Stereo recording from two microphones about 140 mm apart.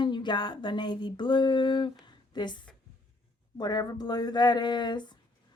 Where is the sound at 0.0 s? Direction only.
35° left (ahead or behind).